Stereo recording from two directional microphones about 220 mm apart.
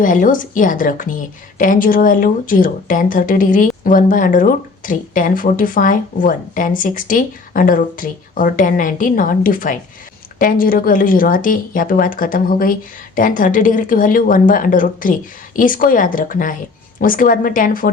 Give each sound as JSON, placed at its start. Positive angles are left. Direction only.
{"t": 0.0, "sound": "a woman's voice", "side_deg": 35}